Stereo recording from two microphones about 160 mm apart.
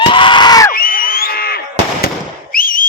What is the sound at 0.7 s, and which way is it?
Fireworks, 65° left (ahead or behind).